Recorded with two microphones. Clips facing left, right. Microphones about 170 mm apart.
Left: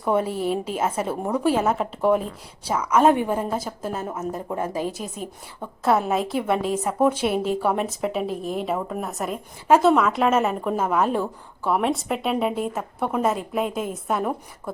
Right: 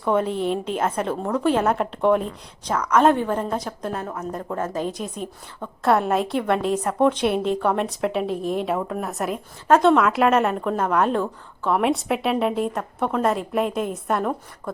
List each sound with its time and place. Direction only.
0.0 s a woman's voice: 10° left (ahead or behind)
4.0 s speech: 20° left (ahead or behind)
4.3 s a woman's voice: 10° left (ahead or behind)